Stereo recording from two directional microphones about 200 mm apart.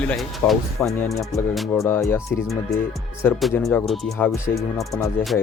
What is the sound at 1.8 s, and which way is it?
Speech, 10° left (ahead or behind).